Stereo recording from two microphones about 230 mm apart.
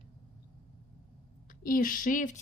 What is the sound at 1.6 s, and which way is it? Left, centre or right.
Speech, left.